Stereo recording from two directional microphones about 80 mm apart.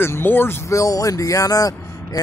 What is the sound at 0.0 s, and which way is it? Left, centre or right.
Speech, left.